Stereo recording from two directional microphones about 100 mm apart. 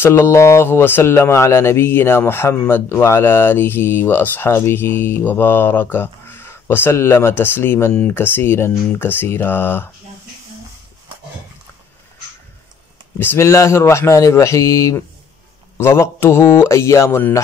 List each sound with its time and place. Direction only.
0.0 s speech: 25° left (ahead or behind)
13.2 s speech: 25° left (ahead or behind)